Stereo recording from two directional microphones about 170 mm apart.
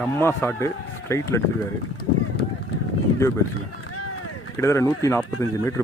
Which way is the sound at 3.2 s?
15° left (ahead or behind).